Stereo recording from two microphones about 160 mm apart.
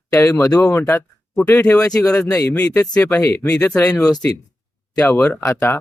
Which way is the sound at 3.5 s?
5° left (ahead or behind).